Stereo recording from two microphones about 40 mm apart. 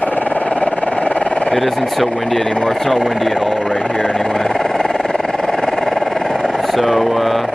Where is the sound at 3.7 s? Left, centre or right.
Left.